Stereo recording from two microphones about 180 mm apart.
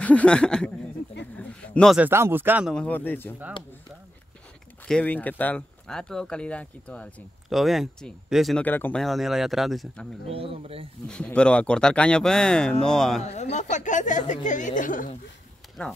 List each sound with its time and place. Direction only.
0.0 s speech: 5° left (ahead or behind)
1.3 s a sound: 5° left (ahead or behind)
2.0 s speech: 10° right (ahead or behind)
2.7 s speech: 10° left (ahead or behind)
4.8 s speech: 5° left (ahead or behind)
10.2 s speech: 30° right (ahead or behind)
11.1 s speech: 5° left (ahead or behind)
13.2 s speech: 40° left (ahead or behind)
15.8 s speech: 5° left (ahead or behind)